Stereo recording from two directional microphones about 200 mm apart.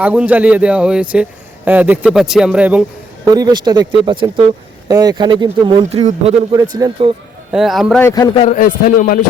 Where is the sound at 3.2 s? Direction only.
20° right (ahead or behind).